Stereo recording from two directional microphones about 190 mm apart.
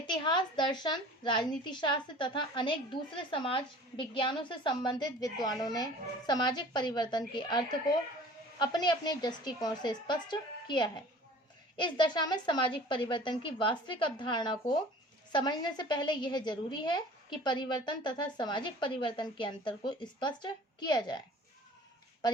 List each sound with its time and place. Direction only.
0.1 s a woman's voice: 25° left (ahead or behind)